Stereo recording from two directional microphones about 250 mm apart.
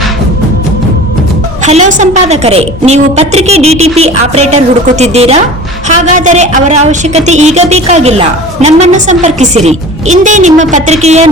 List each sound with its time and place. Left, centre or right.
1.6 s a woman's voice: right